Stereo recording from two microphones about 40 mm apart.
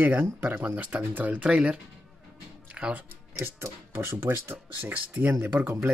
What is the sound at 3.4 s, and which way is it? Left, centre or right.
Speech, right.